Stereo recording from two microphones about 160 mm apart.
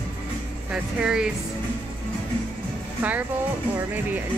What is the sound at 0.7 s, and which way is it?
Speech, 5° right (ahead or behind).